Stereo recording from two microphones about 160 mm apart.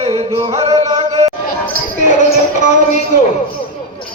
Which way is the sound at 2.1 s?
50° left (ahead or behind).